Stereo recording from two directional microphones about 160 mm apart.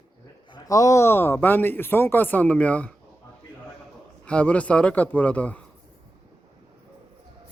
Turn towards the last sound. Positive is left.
turn(degrees=10)  # may be behind; listen again after turning